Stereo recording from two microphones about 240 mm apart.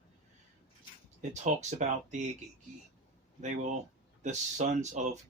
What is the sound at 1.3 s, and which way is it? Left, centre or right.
Speech, right.